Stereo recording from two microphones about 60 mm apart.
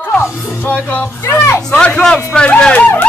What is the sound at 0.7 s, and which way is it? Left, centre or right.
Speech, left.